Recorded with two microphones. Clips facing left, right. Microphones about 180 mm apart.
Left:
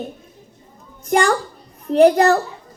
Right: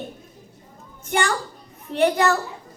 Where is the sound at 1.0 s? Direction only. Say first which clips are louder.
Left 7 dB; 35° left (ahead or behind).